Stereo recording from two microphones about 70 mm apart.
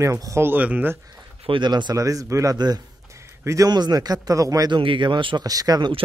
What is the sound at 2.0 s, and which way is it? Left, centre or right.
Speech, right.